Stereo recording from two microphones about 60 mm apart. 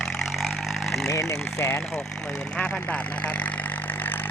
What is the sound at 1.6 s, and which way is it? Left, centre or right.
Speech, left.